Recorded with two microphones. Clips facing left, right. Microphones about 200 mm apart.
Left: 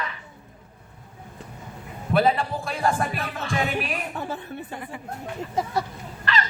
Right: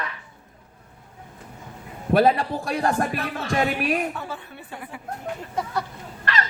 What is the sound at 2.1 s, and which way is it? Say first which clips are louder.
Speech: right 3 dB; 45° right (ahead or behind).